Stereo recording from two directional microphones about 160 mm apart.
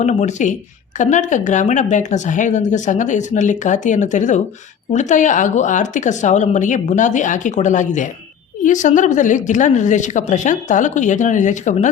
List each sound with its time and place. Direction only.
0.0 s speech: 45° left (ahead or behind)